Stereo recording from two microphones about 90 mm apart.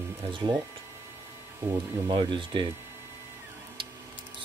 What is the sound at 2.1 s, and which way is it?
Speech, 65° right (ahead or behind).